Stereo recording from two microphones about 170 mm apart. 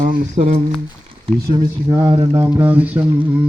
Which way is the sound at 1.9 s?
20° right (ahead or behind).